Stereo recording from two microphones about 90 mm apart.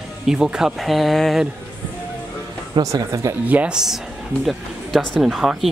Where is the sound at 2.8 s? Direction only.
40° right (ahead or behind).